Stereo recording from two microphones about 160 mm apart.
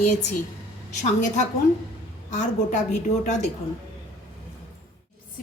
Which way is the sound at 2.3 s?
50° left (ahead or behind).